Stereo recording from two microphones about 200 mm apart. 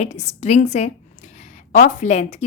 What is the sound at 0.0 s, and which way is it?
A woman's voice, 35° left (ahead or behind).